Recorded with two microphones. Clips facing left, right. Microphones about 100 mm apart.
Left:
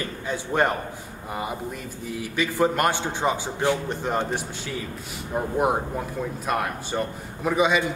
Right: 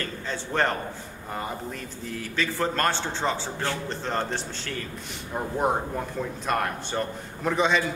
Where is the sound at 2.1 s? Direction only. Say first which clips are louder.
Left 3 dB; 10° left (ahead or behind).